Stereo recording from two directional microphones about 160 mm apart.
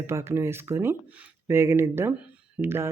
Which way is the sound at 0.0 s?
15° right (ahead or behind).